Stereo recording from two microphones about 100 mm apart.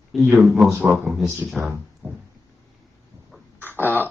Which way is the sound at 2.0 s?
20° right (ahead or behind).